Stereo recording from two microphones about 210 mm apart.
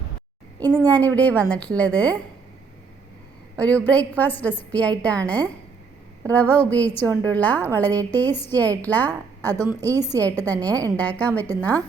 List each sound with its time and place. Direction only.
0.8 s a woman's voice: 10° left (ahead or behind)
3.6 s a woman's voice: 5° left (ahead or behind)
9.9 s a woman's voice: 15° right (ahead or behind)
10.2 s a woman's voice: 10° left (ahead or behind)